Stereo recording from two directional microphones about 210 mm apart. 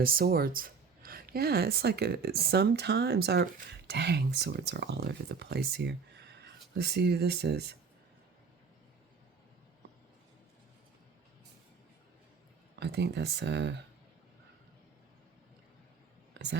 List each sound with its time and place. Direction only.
0.0 s speech: 45° right (ahead or behind)
12.8 s speech: 50° right (ahead or behind)